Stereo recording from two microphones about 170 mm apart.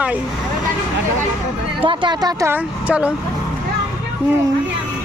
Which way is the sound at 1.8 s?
30° right (ahead or behind).